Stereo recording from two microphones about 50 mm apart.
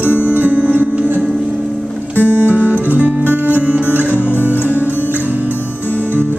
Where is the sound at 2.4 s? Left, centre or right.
Right.